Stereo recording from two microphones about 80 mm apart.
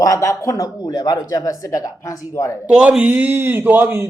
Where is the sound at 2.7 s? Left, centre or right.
Centre; by 4.0 s right.